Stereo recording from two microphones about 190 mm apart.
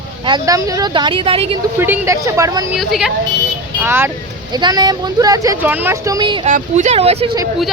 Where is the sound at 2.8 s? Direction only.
Centre (ahead or behind).